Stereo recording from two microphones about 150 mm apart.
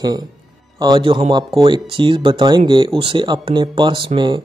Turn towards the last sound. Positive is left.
turn(degrees=-30)  # may be behind; listen again after turning